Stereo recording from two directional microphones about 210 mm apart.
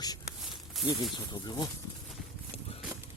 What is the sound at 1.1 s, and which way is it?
Speech, 20° left (ahead or behind).